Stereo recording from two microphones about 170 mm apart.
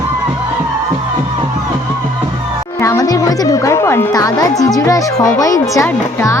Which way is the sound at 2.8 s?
20° left (ahead or behind).